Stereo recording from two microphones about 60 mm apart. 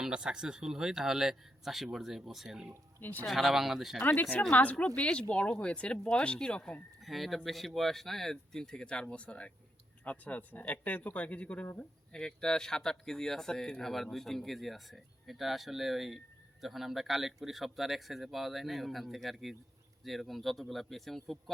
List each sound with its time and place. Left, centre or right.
0.0 s speech: centre
3.0 s speech: left
3.2 s speech: centre
4.0 s speech: left; by 6.7 s centre
7.0 s speech: centre